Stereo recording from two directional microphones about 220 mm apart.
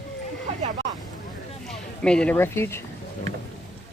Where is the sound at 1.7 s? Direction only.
5° left (ahead or behind).